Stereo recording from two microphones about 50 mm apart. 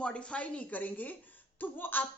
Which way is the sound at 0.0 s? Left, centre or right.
Left.